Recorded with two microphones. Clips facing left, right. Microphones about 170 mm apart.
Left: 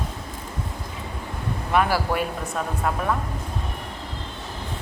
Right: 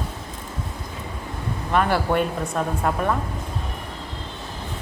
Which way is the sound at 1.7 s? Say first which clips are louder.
Right 2 dB; 5° left (ahead or behind).